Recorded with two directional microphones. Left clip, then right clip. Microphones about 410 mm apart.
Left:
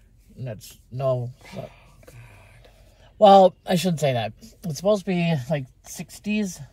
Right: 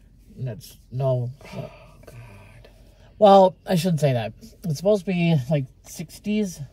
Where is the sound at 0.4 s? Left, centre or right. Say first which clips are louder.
Left 1 dB; centre.